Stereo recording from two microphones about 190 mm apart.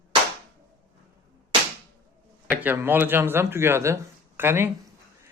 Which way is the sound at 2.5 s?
10° right (ahead or behind).